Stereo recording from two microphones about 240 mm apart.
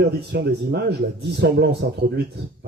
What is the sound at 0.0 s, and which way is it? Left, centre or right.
A man's voice, right.